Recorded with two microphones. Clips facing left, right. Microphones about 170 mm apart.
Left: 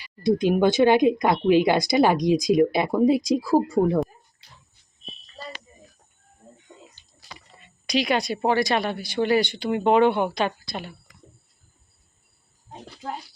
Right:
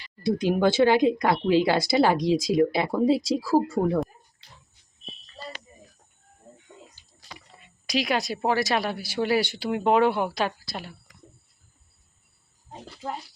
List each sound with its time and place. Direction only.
0.0 s speech: 20° left (ahead or behind)
7.2 s rowboat: 10° left (ahead or behind)
7.6 s speech: centre (ahead or behind)
12.8 s speech: centre (ahead or behind)